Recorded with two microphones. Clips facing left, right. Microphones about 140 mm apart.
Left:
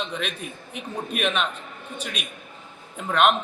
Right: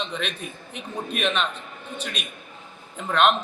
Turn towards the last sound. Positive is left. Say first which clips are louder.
# even
turn(degrees=10)  # may be behind; listen again after turning